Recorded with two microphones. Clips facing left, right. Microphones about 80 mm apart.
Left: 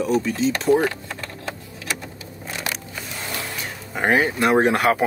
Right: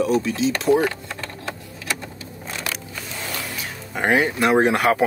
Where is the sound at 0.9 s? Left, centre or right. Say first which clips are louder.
Right 1 dB; centre.